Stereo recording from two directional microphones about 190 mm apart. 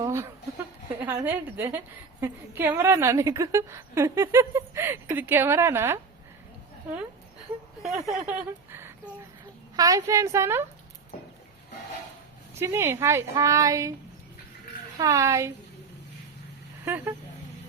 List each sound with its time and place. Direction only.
0.0 s a woman's voice: 15° right (ahead or behind)
7.8 s a woman's voice: centre (ahead or behind)
12.5 s a woman's voice: 15° right (ahead or behind)
14.9 s a woman's voice: 15° right (ahead or behind)
16.8 s a woman's voice: 10° right (ahead or behind)